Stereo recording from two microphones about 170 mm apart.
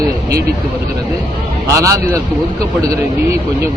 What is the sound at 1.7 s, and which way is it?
Speech, 20° right (ahead or behind).